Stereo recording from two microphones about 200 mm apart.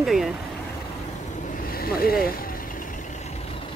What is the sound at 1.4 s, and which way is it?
Vehicle, 45° left (ahead or behind).